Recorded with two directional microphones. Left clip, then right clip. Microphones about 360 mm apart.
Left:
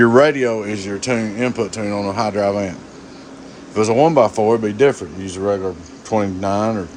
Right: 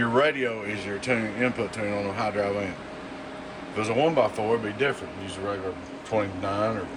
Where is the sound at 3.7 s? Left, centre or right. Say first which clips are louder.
Left 10 dB; centre.